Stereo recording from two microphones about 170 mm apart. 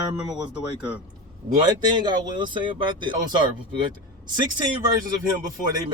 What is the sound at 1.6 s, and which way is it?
Speech, 25° right (ahead or behind).